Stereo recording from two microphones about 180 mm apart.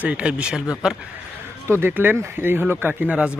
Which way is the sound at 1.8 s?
10° right (ahead or behind).